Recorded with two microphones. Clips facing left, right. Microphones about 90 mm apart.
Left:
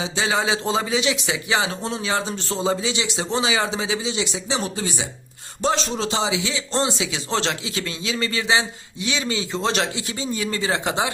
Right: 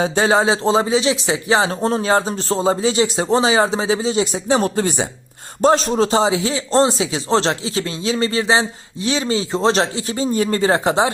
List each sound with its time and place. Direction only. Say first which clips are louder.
0.0 s speech: right 7 dB; 45° right (ahead or behind)